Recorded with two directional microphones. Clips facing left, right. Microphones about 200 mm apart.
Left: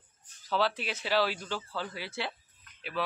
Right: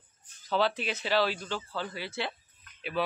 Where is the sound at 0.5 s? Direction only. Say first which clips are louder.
Right 2 dB; 5° left (ahead or behind).